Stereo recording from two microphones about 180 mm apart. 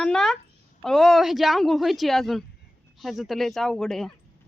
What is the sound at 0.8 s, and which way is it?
A woman's voice, centre (ahead or behind).